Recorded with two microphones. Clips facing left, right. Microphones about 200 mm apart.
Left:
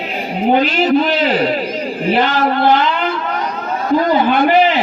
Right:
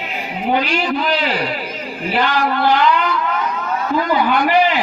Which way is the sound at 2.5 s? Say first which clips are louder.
Left 1 dB; 25° left (ahead or behind).